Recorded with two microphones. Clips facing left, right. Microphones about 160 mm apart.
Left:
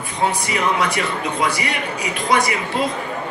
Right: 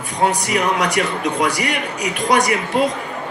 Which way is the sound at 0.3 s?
40° right (ahead or behind).